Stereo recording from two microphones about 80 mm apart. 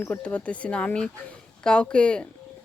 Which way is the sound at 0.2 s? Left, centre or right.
Centre.